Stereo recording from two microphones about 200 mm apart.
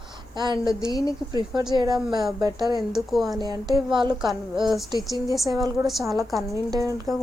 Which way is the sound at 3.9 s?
25° right (ahead or behind).